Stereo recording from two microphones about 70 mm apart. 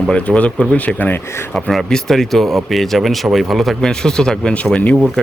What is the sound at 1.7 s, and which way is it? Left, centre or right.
Speech, centre.